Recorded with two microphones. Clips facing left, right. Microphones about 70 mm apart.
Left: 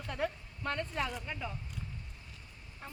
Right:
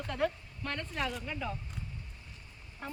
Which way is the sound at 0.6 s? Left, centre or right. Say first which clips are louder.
Left 1 dB; left.